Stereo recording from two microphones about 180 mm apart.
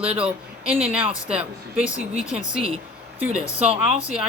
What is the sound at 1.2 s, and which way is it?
Speech, 5° right (ahead or behind).